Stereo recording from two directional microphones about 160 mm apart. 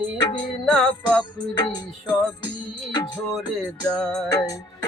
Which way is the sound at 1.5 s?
25° left (ahead or behind).